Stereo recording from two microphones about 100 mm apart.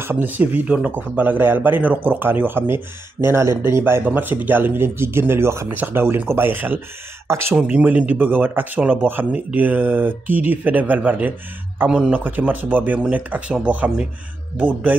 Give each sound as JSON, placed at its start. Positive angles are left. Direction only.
{"t": 0.0, "sound": "speech", "side_deg": -20}
{"t": 7.5, "sound": "speech", "side_deg": -15}